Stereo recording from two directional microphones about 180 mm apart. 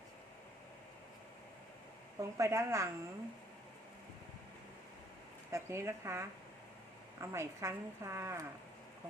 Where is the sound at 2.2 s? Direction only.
15° right (ahead or behind).